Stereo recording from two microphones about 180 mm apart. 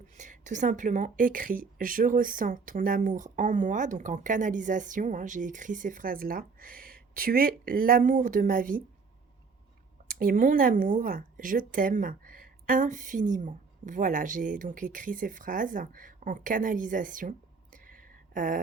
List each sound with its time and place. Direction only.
0.2 s speech: 45° right (ahead or behind)
10.1 s speech: 50° right (ahead or behind)